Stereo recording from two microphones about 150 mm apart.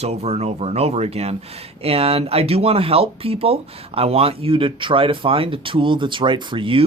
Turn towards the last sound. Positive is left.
turn(degrees=-35)  # may be behind; listen again after turning